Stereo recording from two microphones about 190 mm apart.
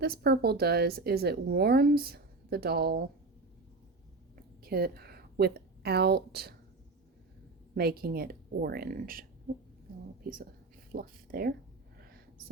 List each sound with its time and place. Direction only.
0.0 s speech: 55° right (ahead or behind)
4.6 s a woman's voice: 55° right (ahead or behind)
7.8 s a woman's voice: 55° right (ahead or behind)
10.2 s a woman's voice: 50° right (ahead or behind)
11.9 s a sound: 55° right (ahead or behind)